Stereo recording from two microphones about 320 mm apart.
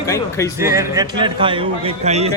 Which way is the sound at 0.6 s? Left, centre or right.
Centre.